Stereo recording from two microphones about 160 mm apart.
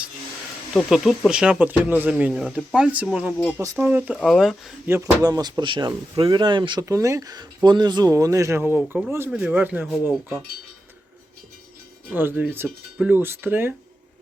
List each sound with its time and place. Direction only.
0.7 s speech: centre (ahead or behind)
3.6 s speech: 15° right (ahead or behind); by 4.7 s centre (ahead or behind)
4.9 s speech: 20° right (ahead or behind)
12.1 s speech: 10° right (ahead or behind)